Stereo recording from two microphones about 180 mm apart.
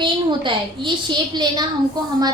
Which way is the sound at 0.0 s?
25° right (ahead or behind).